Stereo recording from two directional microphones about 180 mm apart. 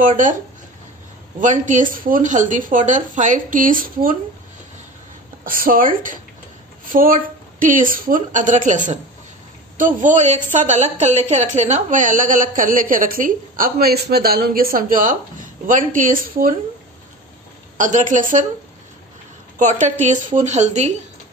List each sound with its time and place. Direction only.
1.4 s a woman's voice: 45° right (ahead or behind)
5.4 s a woman's voice: 50° right (ahead or behind)
17.7 s a woman's voice: 45° right (ahead or behind)
19.6 s a woman's voice: 45° right (ahead or behind)